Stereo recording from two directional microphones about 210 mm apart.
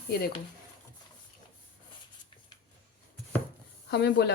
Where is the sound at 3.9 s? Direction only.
55° left (ahead or behind).